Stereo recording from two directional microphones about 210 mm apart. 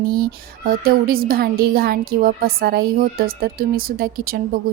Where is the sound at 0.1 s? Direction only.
45° right (ahead or behind).